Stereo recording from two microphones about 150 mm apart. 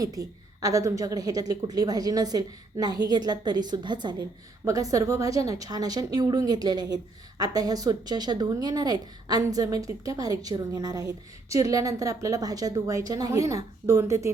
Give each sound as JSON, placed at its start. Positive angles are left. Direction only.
{"t": 0.0, "sound": "a woman's voice", "side_deg": -25}